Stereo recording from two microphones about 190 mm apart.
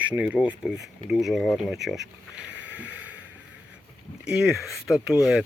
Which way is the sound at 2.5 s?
75° right (ahead or behind).